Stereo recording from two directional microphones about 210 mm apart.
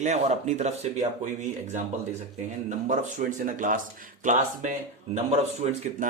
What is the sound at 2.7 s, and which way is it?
Speech, 35° right (ahead or behind).